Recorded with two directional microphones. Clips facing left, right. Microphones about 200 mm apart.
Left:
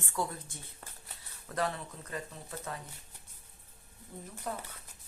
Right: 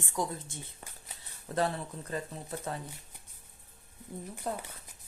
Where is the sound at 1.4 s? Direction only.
30° right (ahead or behind).